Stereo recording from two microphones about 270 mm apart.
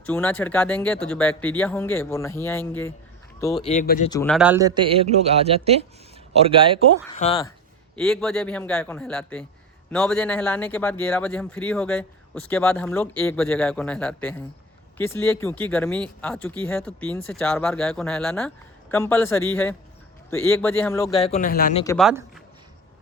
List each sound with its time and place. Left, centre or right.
0.0 s speech: centre
3.7 s speech: left
4.1 s speech: centre
4.4 s a man's voice: centre
7.2 s speech: left
7.9 s speech: centre
21.2 s speech: left
21.9 s speech: centre